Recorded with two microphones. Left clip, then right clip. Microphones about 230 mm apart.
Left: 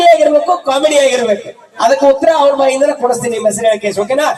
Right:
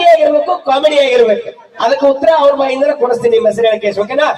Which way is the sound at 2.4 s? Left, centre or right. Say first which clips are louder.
Left 1 dB; left.